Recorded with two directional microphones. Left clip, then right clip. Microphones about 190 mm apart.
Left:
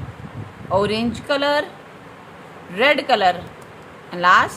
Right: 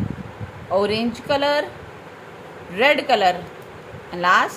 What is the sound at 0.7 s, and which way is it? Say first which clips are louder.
Speech: left 1 dB; 15° left (ahead or behind).